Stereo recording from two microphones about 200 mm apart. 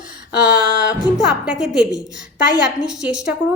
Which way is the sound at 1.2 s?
Centre (ahead or behind).